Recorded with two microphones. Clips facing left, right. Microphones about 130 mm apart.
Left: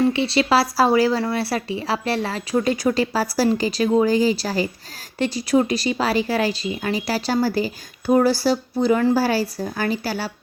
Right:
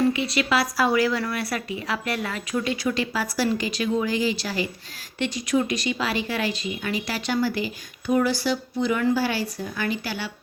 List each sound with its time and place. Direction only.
0.1 s speech: 30° left (ahead or behind)